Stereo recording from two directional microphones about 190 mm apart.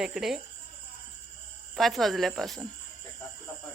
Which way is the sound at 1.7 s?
Centre (ahead or behind).